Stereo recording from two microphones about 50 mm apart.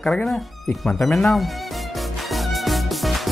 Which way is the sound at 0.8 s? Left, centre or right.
Centre.